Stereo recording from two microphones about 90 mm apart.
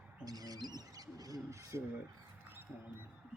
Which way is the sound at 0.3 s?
45° right (ahead or behind).